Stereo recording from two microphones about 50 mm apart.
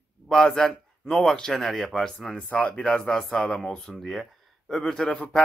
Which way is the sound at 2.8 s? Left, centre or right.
Centre.